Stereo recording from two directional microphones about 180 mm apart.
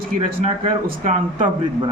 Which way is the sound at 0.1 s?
45° right (ahead or behind).